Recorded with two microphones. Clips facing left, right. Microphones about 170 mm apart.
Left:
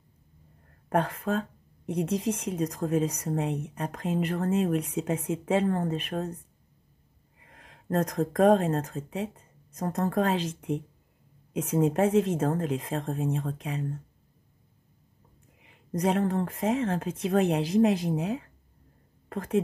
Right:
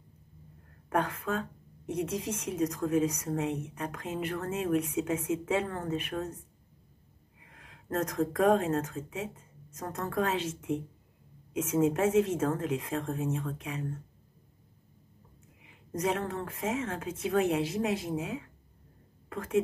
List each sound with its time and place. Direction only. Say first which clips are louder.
0.8 s speech: left 3 dB; 35° left (ahead or behind)
15.9 s a woman's voice: left 5 dB; 35° left (ahead or behind)